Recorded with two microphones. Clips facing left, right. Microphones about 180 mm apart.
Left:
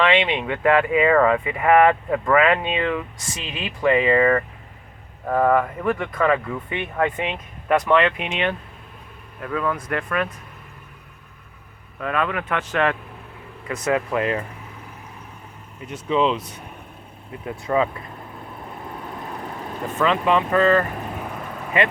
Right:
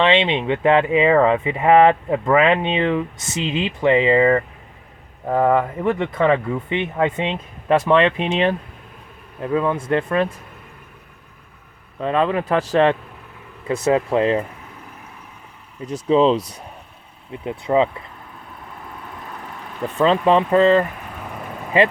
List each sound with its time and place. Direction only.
0.0 s speech: 25° right (ahead or behind)
11.9 s speech: 30° right (ahead or behind)
15.9 s speech: 35° right (ahead or behind)
17.4 s speech: 20° right (ahead or behind)
20.0 s speech: 30° right (ahead or behind)